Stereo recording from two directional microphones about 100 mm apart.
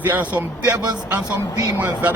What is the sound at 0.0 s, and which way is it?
Speech, 20° right (ahead or behind).